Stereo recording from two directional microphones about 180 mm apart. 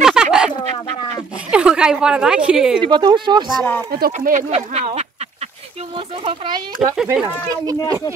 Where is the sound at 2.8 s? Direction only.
25° right (ahead or behind).